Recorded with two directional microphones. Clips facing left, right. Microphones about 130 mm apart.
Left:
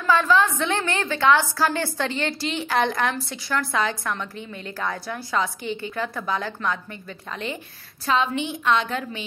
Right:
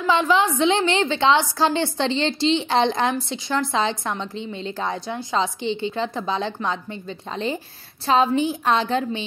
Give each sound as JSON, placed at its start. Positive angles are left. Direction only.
{"t": 0.0, "sound": "a woman's voice", "side_deg": -15}
{"t": 8.1, "sound": "a woman's voice", "side_deg": -35}